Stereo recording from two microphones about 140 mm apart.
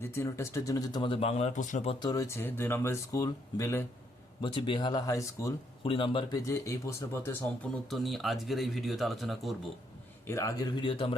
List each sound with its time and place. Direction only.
0.2 s speech: 20° left (ahead or behind); by 1.9 s 60° left (ahead or behind)
1.9 s a man's voice: 30° left (ahead or behind)
2.2 s speech: 20° left (ahead or behind)
4.4 s speech: 35° left (ahead or behind)
5.8 s speech: 40° left (ahead or behind); by 7.3 s 20° left (ahead or behind)
7.9 s speech: centre (ahead or behind)
10.2 s a man's voice: 20° left (ahead or behind); by 11.1 s 40° left (ahead or behind)